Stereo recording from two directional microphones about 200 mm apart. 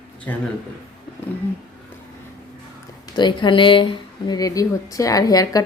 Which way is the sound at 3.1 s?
20° left (ahead or behind).